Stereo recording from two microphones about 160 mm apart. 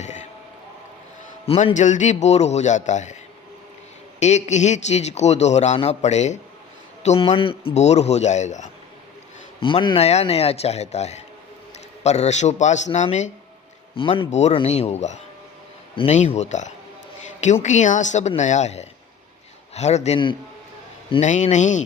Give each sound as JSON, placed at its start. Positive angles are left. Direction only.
{"t": 0.0, "sound": "a sound", "side_deg": 45}
{"t": 1.5, "sound": "a man's voice", "side_deg": 40}
{"t": 4.2, "sound": "a man's voice", "side_deg": 45}
{"t": 9.6, "sound": "a man's voice", "side_deg": 30}
{"t": 13.9, "sound": "speech", "side_deg": 35}
{"t": 14.3, "sound": "a man's voice", "side_deg": 45}
{"t": 21.2, "sound": "a man's voice", "side_deg": 50}